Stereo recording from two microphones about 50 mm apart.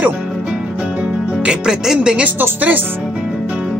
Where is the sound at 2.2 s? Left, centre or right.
Right.